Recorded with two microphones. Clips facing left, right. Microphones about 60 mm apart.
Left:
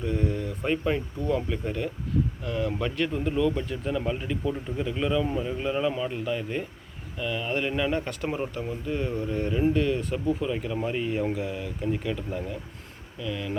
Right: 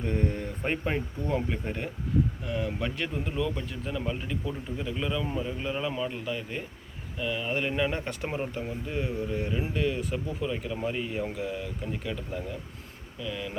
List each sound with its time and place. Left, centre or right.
0.0 s speech: right
2.4 s speech: centre